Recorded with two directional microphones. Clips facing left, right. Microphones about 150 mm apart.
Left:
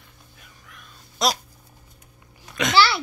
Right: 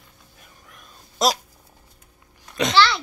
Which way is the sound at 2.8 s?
10° left (ahead or behind).